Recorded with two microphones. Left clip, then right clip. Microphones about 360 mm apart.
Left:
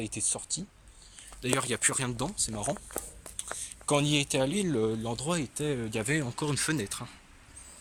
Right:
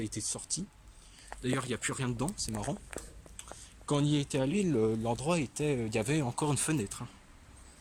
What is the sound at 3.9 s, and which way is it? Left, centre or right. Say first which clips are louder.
Speech: left 4 dB; centre.